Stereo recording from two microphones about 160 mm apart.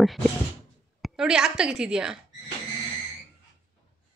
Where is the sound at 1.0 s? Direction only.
5° right (ahead or behind).